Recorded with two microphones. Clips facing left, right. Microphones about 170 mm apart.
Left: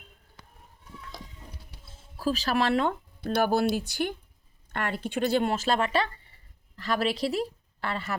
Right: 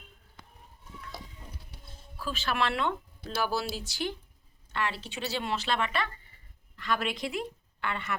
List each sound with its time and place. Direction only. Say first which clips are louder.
1.8 s a sound: right 1 dB; centre (ahead or behind)
2.1 s speech: left 5 dB; 40° left (ahead or behind)
3.3 s speech: left 7 dB; 55° left (ahead or behind); by 8.1 s 35° left (ahead or behind)